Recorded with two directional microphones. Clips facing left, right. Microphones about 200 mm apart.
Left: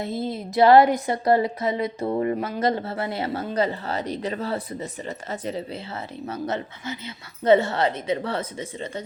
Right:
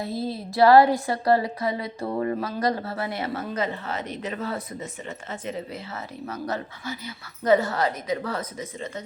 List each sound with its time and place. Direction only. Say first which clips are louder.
0.0 s speech: left 1 dB; 20° left (ahead or behind)